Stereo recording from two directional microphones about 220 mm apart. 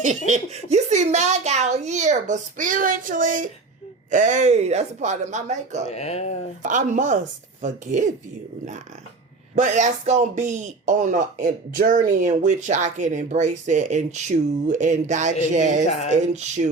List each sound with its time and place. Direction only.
0.3 s speech: 30° right (ahead or behind)
5.9 s speech: 30° left (ahead or behind)
6.6 s speech: 35° right (ahead or behind)
9.6 s speech: 35° right (ahead or behind)